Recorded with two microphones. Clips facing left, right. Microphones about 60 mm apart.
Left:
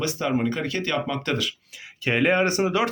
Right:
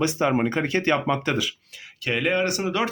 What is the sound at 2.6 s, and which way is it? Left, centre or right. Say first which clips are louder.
Speech: left 3 dB; centre.